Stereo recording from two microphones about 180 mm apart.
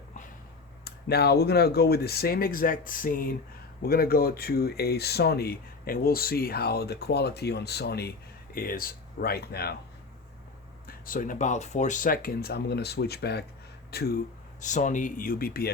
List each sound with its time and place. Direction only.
0.9 s speech: 60° left (ahead or behind)
10.8 s speech: 50° left (ahead or behind)
14.6 s speech: 45° left (ahead or behind)